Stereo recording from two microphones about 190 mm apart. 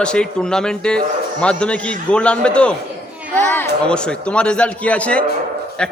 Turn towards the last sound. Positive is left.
turn(degrees=5)  # may be behind; listen again after turning